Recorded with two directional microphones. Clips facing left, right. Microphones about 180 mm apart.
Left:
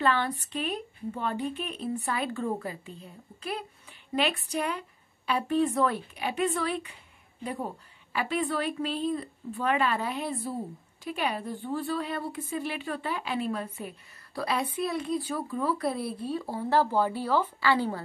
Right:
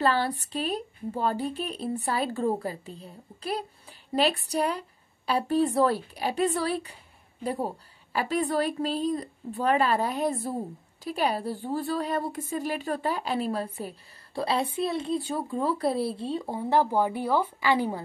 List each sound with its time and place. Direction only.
0.0 s a woman's voice: 35° right (ahead or behind); by 18.0 s 15° right (ahead or behind)